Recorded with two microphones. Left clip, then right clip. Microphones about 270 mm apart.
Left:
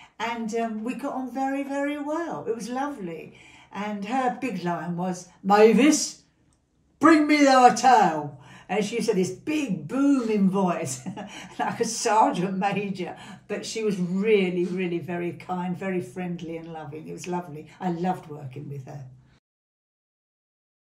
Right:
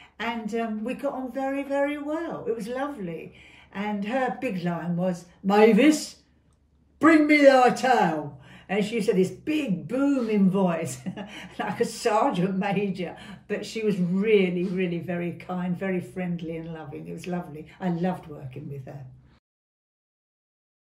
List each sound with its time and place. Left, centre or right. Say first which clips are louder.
0.2 s a woman's voice: left 1 dB; centre